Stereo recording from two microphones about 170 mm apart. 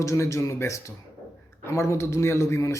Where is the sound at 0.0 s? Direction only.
15° left (ahead or behind).